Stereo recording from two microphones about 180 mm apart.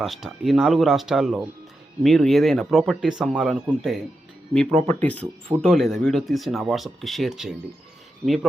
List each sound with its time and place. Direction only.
0.0 s speech: centre (ahead or behind)
4.7 s speech: 40° right (ahead or behind)
5.0 s speech: 10° left (ahead or behind)